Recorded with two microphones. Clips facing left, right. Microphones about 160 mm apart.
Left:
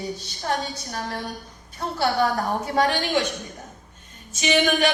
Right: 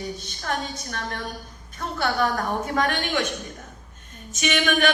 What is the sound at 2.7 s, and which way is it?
Speech, 30° left (ahead or behind).